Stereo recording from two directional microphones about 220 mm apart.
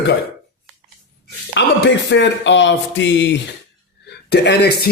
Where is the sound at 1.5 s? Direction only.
50° left (ahead or behind).